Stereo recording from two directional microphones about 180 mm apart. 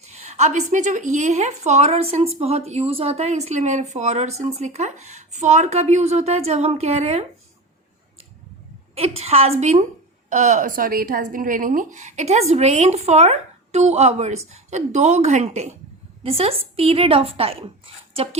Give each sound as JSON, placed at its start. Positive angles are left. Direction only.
{"t": 0.1, "sound": "a woman's voice", "side_deg": -40}
{"t": 9.0, "sound": "a woman's voice", "side_deg": -35}